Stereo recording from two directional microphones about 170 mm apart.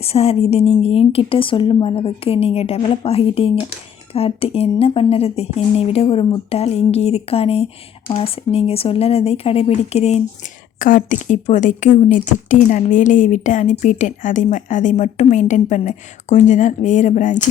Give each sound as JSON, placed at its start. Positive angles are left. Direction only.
{"t": 0.0, "sound": "speech", "side_deg": 35}
{"t": 10.8, "sound": "speech", "side_deg": 50}